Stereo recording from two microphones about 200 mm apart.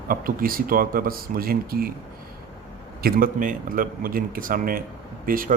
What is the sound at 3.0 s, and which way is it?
A man's voice, 45° right (ahead or behind).